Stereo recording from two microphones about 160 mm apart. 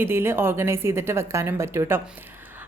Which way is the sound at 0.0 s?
15° right (ahead or behind).